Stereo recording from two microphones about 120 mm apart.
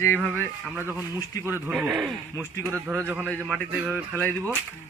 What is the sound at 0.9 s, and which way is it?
Speech, 20° right (ahead or behind).